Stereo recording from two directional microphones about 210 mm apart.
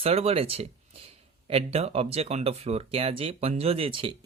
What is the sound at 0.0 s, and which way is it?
Speech, 30° right (ahead or behind).